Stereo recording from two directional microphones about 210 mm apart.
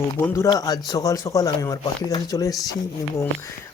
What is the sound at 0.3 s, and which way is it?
Speech, 15° left (ahead or behind).